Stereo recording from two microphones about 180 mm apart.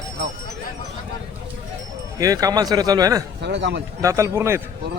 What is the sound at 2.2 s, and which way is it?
Speech, 20° right (ahead or behind).